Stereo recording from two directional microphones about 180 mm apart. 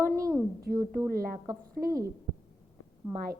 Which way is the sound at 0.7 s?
60° right (ahead or behind).